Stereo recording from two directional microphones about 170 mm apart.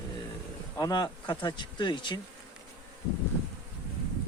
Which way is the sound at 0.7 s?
25° left (ahead or behind).